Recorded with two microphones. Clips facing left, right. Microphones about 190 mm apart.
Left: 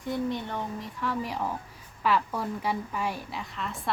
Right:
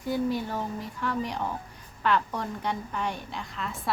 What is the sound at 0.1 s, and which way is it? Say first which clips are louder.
A woman's voice: right 2 dB; 5° right (ahead or behind).